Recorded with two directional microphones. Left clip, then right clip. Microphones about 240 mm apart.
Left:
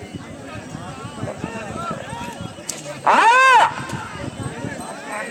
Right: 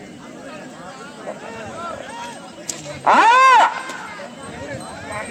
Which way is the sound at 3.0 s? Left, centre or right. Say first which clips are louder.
Right 1 dB; centre.